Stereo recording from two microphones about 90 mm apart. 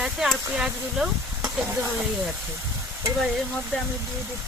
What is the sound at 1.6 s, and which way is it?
Speech, 25° right (ahead or behind).